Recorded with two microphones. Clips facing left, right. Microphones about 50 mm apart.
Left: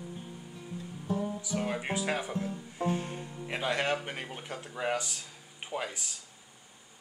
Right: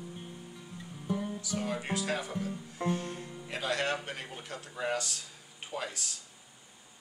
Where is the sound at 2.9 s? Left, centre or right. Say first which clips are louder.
Left 1 dB; left.